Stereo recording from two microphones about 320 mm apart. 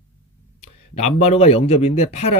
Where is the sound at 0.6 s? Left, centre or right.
Centre.